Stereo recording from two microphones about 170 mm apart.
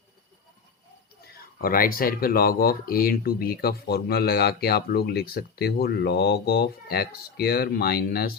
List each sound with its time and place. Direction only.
1.4 s speech: 55° left (ahead or behind)